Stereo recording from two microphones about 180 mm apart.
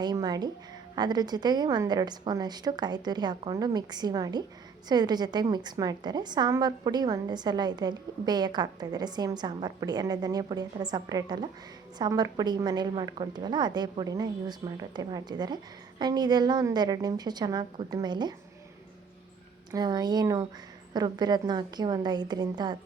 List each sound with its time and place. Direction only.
0.0 s a woman's voice: 20° right (ahead or behind)
19.7 s a woman's voice: 25° right (ahead or behind)